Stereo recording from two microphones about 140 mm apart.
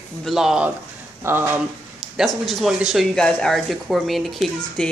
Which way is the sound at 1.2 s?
15° right (ahead or behind).